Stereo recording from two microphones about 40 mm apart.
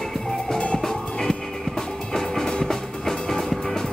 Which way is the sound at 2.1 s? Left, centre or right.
Centre.